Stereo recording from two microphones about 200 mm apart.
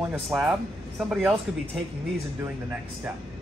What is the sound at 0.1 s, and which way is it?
Speech, centre (ahead or behind).